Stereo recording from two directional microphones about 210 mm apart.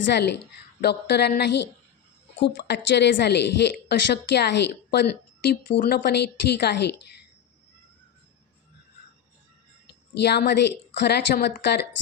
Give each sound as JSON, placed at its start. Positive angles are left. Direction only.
{"t": 0.0, "sound": "a woman's voice", "side_deg": 55}
{"t": 10.2, "sound": "a woman's voice", "side_deg": 50}